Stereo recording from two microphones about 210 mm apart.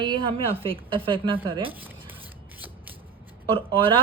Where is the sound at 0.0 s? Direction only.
25° right (ahead or behind).